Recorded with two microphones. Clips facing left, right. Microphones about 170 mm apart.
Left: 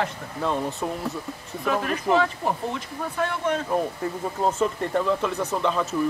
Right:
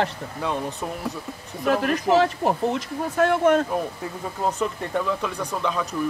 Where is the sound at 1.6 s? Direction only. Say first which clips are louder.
Right 4 dB; 50° right (ahead or behind).